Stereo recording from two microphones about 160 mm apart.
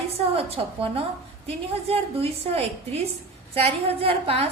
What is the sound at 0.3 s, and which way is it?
A woman's voice, 40° right (ahead or behind).